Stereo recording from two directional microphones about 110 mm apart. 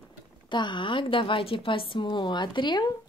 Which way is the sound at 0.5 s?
45° left (ahead or behind).